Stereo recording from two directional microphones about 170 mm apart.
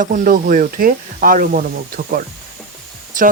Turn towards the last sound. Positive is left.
turn(degrees=-50)  # may be behind; listen again after turning